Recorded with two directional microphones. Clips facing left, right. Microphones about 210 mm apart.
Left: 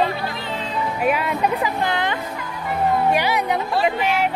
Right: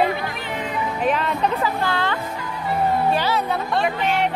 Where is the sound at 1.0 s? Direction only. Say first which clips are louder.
Left 1 dB; 10° left (ahead or behind).